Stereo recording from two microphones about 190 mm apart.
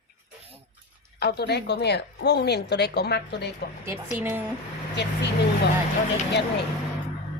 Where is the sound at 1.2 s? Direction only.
60° left (ahead or behind).